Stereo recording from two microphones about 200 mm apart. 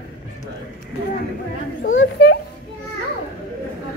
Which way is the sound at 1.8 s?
70° left (ahead or behind).